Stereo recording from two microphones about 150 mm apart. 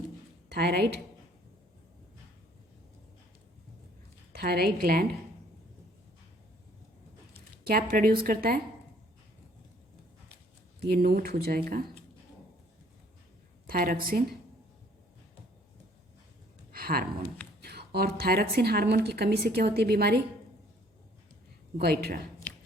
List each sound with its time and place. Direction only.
0.4 s a woman's voice: 90° right
4.3 s a woman's voice: 90° right
7.7 s a woman's voice: 80° right
10.8 s a woman's voice: 85° right
13.7 s a woman's voice: 70° right (ahead or behind)
16.7 s speech: 75° right (ahead or behind)
17.6 s a woman's voice: 90° right
21.8 s a woman's voice: 90° right